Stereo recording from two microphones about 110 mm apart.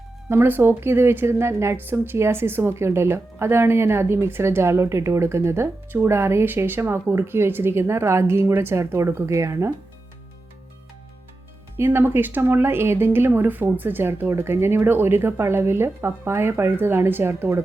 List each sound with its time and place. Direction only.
0.3 s a woman's voice: 20° right (ahead or behind)
11.8 s a woman's voice: 20° right (ahead or behind)